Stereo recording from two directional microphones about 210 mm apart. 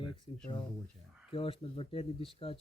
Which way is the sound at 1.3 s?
25° left (ahead or behind).